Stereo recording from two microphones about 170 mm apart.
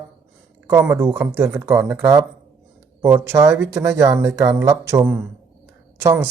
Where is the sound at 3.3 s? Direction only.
15° right (ahead or behind).